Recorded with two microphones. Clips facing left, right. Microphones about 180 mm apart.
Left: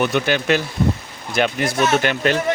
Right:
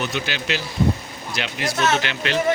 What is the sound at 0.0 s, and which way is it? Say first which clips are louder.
Speech: left 8 dB; 55° left (ahead or behind).